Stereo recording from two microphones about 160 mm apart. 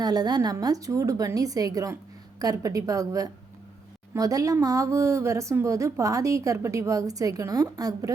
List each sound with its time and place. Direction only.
0.0 s speech: 25° right (ahead or behind)